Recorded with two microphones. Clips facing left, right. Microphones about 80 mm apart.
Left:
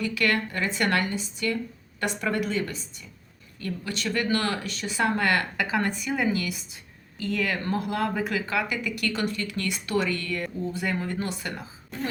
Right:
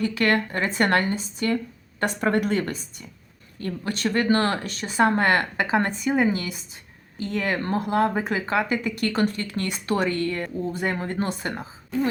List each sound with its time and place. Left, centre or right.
0.0 s a woman's voice: right